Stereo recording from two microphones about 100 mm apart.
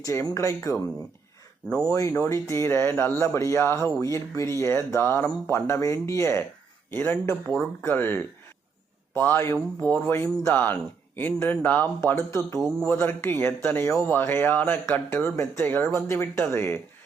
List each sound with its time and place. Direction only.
0.0 s speech: 35° left (ahead or behind)
1.9 s speech: 30° left (ahead or behind)